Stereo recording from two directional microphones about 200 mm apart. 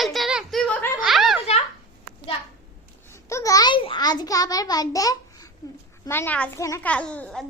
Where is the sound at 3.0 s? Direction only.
15° left (ahead or behind).